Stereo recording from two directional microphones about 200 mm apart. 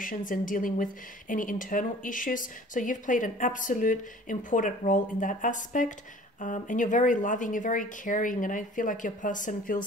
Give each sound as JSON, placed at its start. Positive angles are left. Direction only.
{"t": 0.0, "sound": "a woman's voice", "side_deg": 40}